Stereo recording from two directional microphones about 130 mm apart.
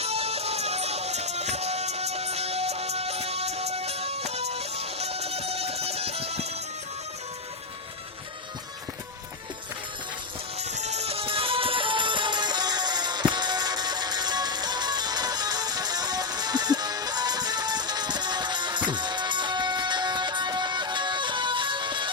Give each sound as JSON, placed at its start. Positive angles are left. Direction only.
{"t": 0.0, "sound": "music", "side_deg": -50}
{"t": 10.6, "sound": "music", "side_deg": -60}